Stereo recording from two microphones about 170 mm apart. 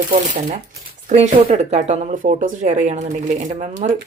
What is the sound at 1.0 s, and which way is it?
Speech, 40° right (ahead or behind).